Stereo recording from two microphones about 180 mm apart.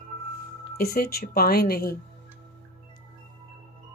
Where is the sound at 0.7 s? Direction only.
60° left (ahead or behind).